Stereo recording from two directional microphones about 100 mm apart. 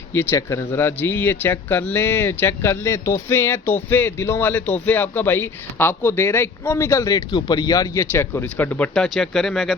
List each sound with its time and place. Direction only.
0.1 s speech: 25° left (ahead or behind)
8.1 s speech: 25° left (ahead or behind)
9.0 s speech: 5° left (ahead or behind)